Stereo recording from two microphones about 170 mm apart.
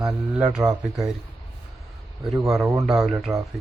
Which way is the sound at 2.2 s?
5° right (ahead or behind).